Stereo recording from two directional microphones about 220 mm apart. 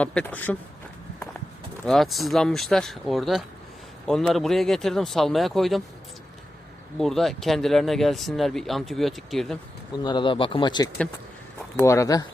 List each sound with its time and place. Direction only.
0.0 s speech: 5° left (ahead or behind)
1.8 s speech: centre (ahead or behind)
7.0 s speech: centre (ahead or behind)
10.0 s speech: 20° left (ahead or behind)